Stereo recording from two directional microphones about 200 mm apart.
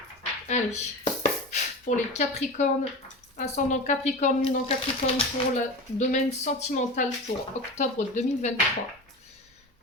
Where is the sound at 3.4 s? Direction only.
35° left (ahead or behind).